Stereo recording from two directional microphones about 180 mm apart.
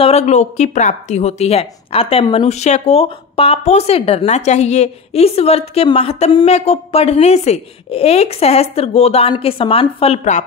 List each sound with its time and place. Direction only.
0.0 s a woman's voice: 35° left (ahead or behind)